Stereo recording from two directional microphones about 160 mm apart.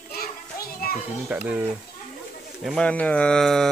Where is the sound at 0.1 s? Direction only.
70° left (ahead or behind).